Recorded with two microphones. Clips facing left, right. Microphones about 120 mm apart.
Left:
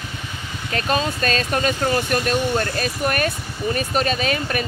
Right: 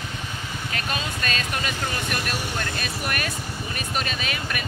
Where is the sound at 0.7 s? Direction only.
40° left (ahead or behind).